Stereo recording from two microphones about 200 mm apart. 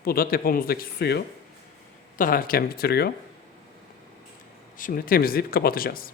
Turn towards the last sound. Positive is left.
turn(degrees=45)  # may be behind; listen again after turning